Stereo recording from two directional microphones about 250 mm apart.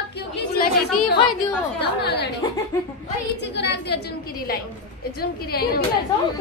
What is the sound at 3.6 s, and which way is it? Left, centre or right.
Speech, left.